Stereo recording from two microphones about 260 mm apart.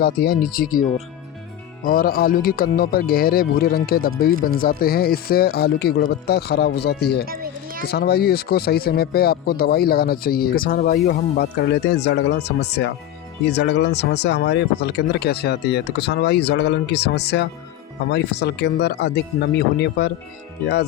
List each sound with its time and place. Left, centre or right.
0.0 s speech: left
7.3 s a sound: right
7.9 s speech: left